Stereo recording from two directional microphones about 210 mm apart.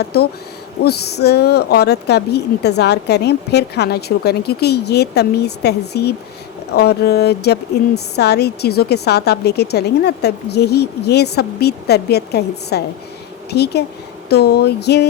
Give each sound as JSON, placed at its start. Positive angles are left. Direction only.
{"t": 0.0, "sound": "speech", "side_deg": 50}